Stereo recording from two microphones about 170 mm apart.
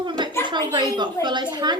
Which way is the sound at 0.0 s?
25° right (ahead or behind).